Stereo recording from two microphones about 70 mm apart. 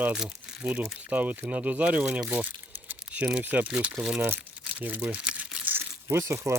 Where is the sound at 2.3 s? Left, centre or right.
Right.